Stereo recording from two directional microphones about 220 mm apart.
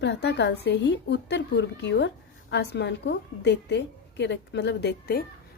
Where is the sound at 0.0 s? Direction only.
50° left (ahead or behind).